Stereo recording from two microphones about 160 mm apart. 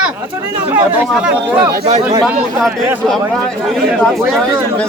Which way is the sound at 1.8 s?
35° right (ahead or behind).